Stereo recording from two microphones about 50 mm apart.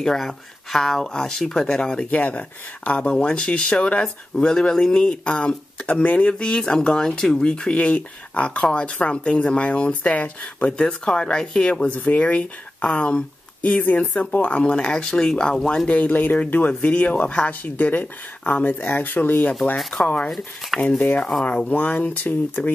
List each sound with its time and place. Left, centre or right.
0.0 s speech: centre
2.0 s speech: left
11.9 s speech: left
14.7 s speech: centre
15.9 s speech: left
20.2 s speech: centre
21.6 s speech: left